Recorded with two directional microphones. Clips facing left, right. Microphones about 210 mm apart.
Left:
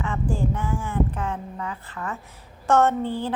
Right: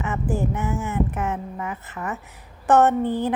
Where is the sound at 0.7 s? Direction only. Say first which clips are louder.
Right 1 dB; 20° right (ahead or behind).